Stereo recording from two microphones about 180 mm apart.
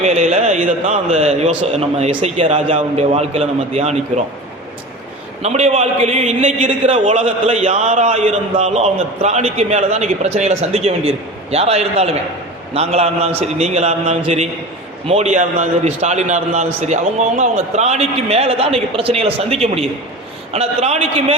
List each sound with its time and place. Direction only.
0.0 s a man's voice: 40° right (ahead or behind)
5.4 s a man's voice: 40° right (ahead or behind)